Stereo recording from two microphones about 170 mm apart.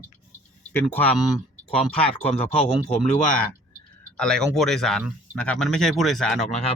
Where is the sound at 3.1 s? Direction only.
45° left (ahead or behind).